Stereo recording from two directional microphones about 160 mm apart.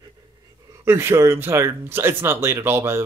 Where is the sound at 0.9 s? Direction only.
15° right (ahead or behind).